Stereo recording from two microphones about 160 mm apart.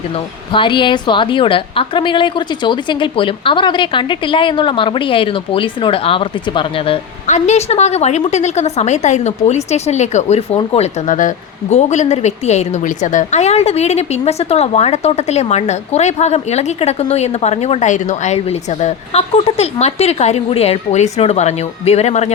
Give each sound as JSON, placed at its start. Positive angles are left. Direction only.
{"t": 0.5, "sound": "a woman's voice", "side_deg": 30}
{"t": 7.3, "sound": "a woman's voice", "side_deg": 45}